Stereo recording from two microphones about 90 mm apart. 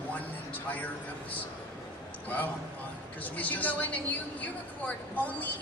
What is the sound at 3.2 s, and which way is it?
A woman's voice, 20° left (ahead or behind).